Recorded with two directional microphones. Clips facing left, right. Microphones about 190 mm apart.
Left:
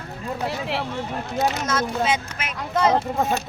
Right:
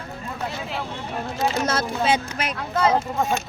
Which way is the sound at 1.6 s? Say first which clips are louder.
Even; 35° right (ahead or behind).